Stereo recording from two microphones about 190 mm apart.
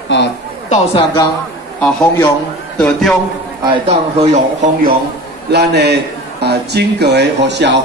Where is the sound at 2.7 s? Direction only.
5° left (ahead or behind).